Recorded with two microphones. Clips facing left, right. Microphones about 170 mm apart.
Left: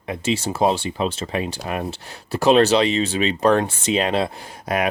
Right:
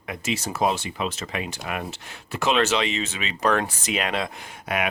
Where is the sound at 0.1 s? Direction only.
30° left (ahead or behind).